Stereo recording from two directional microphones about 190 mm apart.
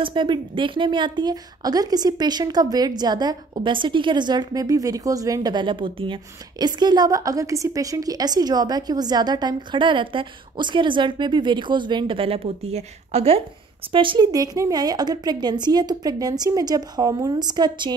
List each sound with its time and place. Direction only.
0.0 s a woman's voice: 25° right (ahead or behind)